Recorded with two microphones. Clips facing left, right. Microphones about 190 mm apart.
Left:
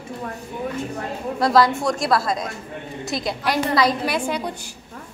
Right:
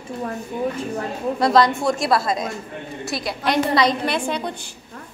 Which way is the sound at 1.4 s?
Centre (ahead or behind).